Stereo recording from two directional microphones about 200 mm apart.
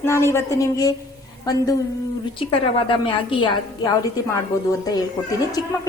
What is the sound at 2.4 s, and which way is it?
A woman's voice, 25° left (ahead or behind).